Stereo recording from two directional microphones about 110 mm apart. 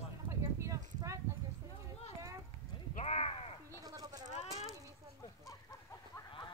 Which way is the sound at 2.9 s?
75° left (ahead or behind).